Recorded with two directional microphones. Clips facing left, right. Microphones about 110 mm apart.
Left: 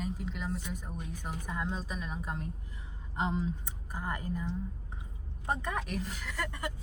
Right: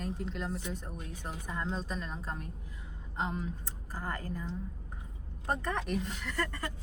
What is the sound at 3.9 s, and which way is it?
A woman's voice, 15° left (ahead or behind).